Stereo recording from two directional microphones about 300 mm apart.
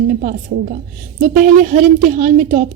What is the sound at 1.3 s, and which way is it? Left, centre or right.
A woman's voice, right.